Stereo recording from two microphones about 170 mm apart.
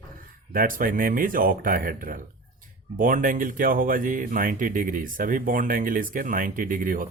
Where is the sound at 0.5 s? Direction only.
55° right (ahead or behind).